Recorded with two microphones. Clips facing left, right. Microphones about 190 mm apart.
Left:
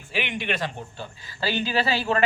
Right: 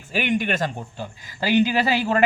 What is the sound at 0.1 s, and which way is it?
Speech, 45° right (ahead or behind).